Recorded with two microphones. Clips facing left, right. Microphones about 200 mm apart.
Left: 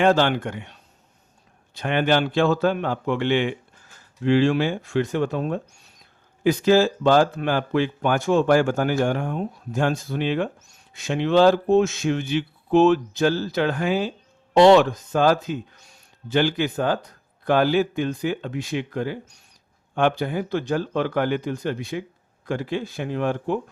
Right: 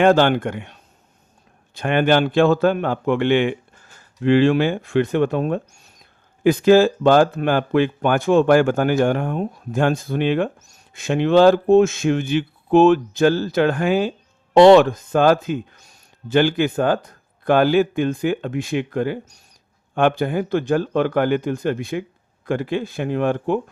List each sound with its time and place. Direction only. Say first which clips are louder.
0.0 s speech: right 4 dB; 55° right (ahead or behind)